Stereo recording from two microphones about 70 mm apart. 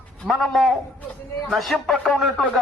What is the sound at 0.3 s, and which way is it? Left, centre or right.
A man's voice, centre.